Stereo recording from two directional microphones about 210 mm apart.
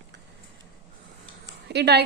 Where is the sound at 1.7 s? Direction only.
55° right (ahead or behind).